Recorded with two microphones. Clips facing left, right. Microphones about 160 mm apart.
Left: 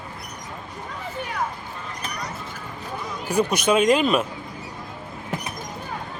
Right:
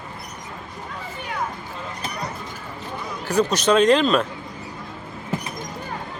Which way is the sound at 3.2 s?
10° left (ahead or behind).